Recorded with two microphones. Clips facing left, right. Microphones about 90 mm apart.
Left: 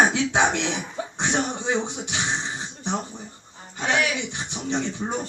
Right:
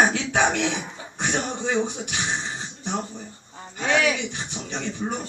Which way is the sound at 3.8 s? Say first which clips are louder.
Right 2 dB; 20° left (ahead or behind).